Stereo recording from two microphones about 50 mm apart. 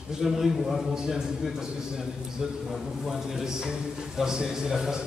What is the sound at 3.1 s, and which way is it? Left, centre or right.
A man's voice, centre.